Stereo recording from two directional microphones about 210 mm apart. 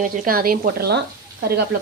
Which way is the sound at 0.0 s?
45° right (ahead or behind).